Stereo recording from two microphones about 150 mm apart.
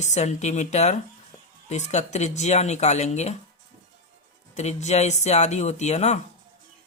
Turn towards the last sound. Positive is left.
turn(degrees=50)  # may be behind; listen again after turning